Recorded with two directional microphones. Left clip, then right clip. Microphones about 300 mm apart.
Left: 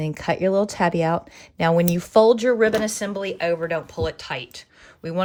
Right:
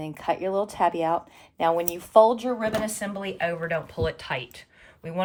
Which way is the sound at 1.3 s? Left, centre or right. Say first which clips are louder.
Left 3 dB; left.